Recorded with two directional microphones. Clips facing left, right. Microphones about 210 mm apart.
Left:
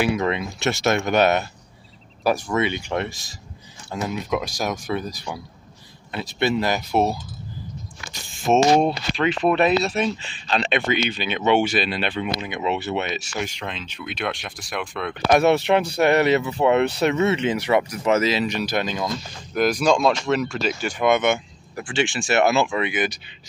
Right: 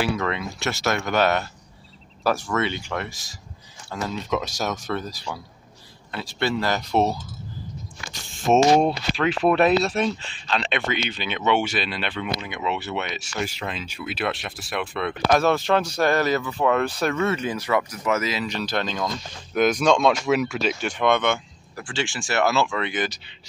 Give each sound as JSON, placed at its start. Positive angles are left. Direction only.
{"t": 0.0, "sound": "speech", "side_deg": 20}
{"t": 8.5, "sound": "speech", "side_deg": 5}
{"t": 10.5, "sound": "speech", "side_deg": 15}
{"t": 13.4, "sound": "speech", "side_deg": -5}
{"t": 15.3, "sound": "speech", "side_deg": 20}
{"t": 18.6, "sound": "speech", "side_deg": 10}
{"t": 21.2, "sound": "speech", "side_deg": 15}